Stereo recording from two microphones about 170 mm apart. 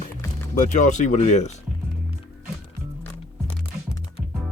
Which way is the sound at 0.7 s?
45° left (ahead or behind).